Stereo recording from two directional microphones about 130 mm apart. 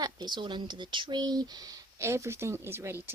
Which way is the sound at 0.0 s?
35° right (ahead or behind).